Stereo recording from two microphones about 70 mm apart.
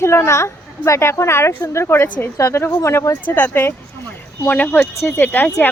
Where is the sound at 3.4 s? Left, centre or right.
Left.